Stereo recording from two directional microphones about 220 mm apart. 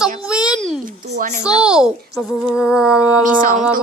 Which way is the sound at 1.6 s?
5° right (ahead or behind).